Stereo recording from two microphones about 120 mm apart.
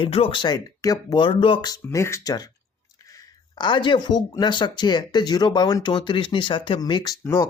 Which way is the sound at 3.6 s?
40° left (ahead or behind).